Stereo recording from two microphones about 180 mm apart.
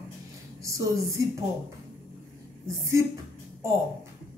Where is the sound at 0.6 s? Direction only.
20° right (ahead or behind).